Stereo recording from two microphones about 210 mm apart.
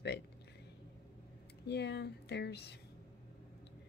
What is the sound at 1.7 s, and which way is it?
Speech, 55° left (ahead or behind).